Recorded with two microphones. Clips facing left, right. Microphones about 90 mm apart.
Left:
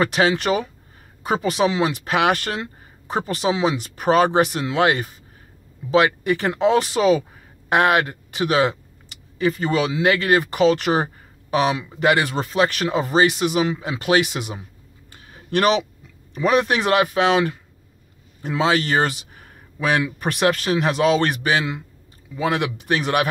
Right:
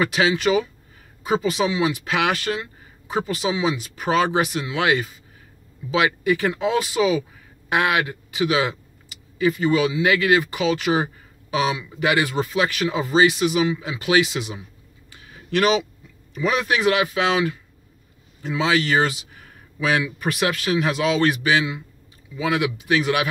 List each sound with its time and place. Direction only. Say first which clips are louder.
0.0 s speech: left 1 dB; 50° left (ahead or behind)
15.3 s a sound: left 1 dB; 50° left (ahead or behind)
16.3 s speech: left 3 dB; 55° left (ahead or behind)